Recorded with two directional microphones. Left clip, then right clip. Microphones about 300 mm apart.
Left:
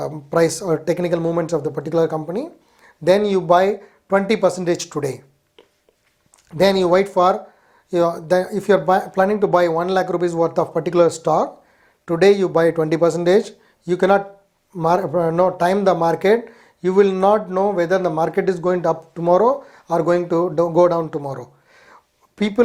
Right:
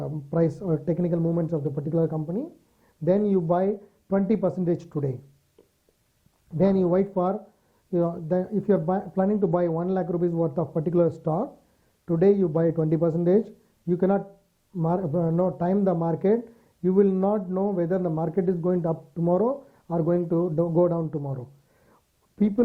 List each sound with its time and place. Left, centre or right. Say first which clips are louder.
0.0 s speech: left 8 dB; centre
0.3 s speech: left 8 dB; centre
6.6 s speech: left 8 dB; centre
22.4 s speech: left 7 dB; centre